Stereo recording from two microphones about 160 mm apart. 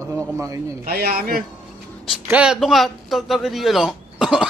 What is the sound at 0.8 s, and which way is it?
Speech, 75° right (ahead or behind).